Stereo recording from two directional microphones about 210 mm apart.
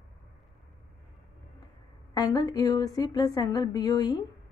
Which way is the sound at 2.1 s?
20° left (ahead or behind).